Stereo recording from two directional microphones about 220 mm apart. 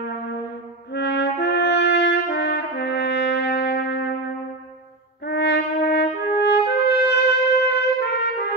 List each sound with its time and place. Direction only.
0.9 s brass instrument: 50° left (ahead or behind)
5.2 s brass instrument: 50° left (ahead or behind)
7.7 s trumpet: 50° left (ahead or behind)